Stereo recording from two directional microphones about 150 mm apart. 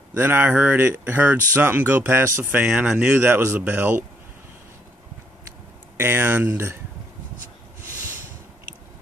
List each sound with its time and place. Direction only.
0.1 s speech: 15° right (ahead or behind)
5.9 s speech: 15° right (ahead or behind)